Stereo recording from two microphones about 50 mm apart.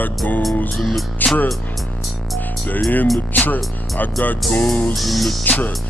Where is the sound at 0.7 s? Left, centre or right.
Centre.